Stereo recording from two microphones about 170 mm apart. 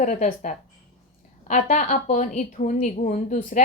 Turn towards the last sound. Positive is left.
turn(degrees=50)  # may be behind; listen again after turning